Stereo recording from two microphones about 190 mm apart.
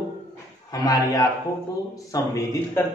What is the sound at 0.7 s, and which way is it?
A man's voice, 20° left (ahead or behind).